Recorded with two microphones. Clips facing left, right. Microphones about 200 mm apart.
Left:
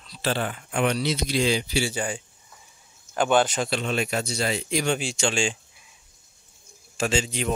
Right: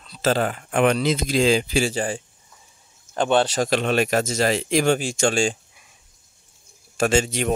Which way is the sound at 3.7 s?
80° right.